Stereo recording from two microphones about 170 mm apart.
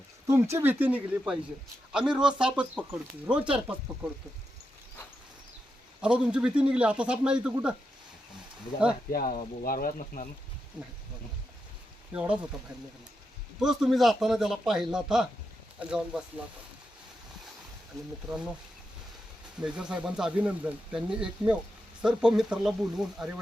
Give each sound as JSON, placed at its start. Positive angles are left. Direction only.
{"t": 0.3, "sound": "speech", "side_deg": -15}
{"t": 6.0, "sound": "speech", "side_deg": -5}
{"t": 9.1, "sound": "speech", "side_deg": 60}
{"t": 12.1, "sound": "speech", "side_deg": -5}
{"t": 13.6, "sound": "speech", "side_deg": 0}
{"t": 18.3, "sound": "speech", "side_deg": -5}
{"t": 19.5, "sound": "speech", "side_deg": -5}